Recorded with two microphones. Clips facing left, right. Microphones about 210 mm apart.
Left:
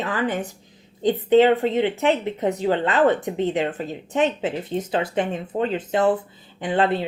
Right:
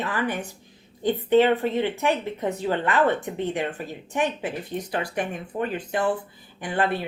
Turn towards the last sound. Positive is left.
turn(degrees=20)  # may be behind; listen again after turning